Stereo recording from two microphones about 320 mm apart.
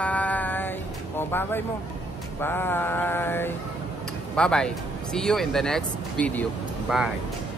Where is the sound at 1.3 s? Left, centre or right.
Centre.